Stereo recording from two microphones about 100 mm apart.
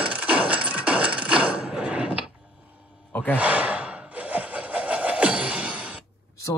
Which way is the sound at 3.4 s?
15° right (ahead or behind).